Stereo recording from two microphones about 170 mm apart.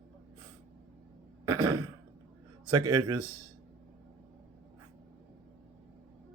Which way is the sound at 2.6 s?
10° right (ahead or behind).